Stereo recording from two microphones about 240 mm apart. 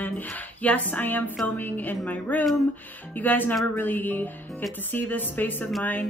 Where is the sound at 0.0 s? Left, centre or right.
Centre.